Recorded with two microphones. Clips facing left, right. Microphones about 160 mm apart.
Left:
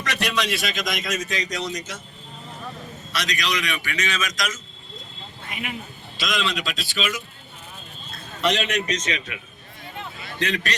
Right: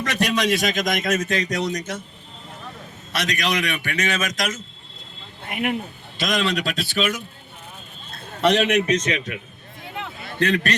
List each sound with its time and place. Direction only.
0.0 s a man's voice: 50° right (ahead or behind)
3.1 s a man's voice: 55° right (ahead or behind)
10.2 s a sound: 55° right (ahead or behind)